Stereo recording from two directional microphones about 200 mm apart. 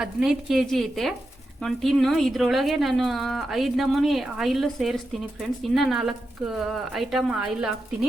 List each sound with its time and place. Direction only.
0.0 s a woman's voice: centre (ahead or behind)